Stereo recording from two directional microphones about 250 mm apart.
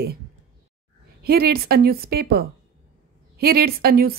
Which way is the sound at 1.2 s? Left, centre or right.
Right.